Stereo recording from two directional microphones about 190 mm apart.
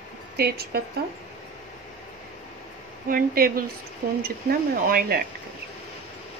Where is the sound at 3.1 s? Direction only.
45° right (ahead or behind).